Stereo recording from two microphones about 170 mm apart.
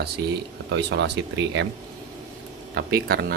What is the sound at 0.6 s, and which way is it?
Speech, 90° right.